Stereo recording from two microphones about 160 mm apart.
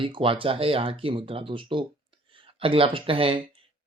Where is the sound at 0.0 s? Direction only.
35° right (ahead or behind).